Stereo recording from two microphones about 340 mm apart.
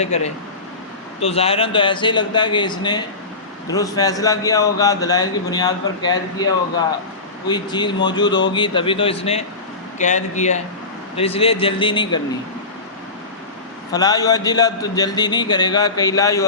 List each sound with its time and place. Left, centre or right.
0.0 s a man's voice: centre
13.9 s a man's voice: centre